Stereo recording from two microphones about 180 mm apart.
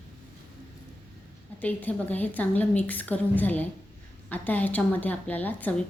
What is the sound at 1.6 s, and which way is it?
A woman's voice, 10° left (ahead or behind).